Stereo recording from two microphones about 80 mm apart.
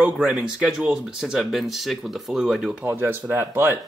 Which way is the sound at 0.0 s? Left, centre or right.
Centre.